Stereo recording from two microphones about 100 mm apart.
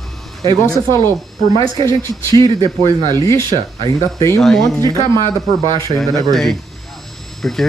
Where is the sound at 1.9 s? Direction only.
30° left (ahead or behind).